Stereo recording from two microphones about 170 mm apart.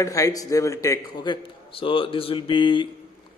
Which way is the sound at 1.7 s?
30° left (ahead or behind).